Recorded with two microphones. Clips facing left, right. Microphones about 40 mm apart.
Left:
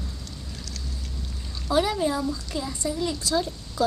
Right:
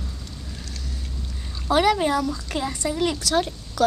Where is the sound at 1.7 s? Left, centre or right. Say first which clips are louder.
Right 4 dB; right.